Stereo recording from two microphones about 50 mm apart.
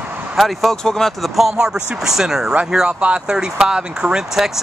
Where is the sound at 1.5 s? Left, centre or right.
Centre.